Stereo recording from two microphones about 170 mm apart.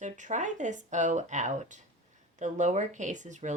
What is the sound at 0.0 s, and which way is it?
Speech, 45° right (ahead or behind).